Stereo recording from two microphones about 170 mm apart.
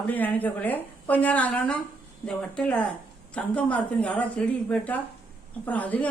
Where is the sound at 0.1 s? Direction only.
10° left (ahead or behind).